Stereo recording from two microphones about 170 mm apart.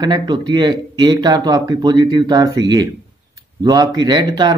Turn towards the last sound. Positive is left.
turn(degrees=-25)  # may be behind; listen again after turning